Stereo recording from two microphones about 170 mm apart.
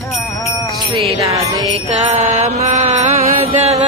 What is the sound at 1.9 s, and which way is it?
Mantra, 40° right (ahead or behind).